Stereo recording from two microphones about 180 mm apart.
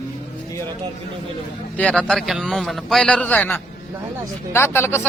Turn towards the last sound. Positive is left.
turn(degrees=15)  # may be behind; listen again after turning